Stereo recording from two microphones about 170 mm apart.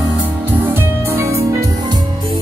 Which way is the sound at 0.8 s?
15° right (ahead or behind).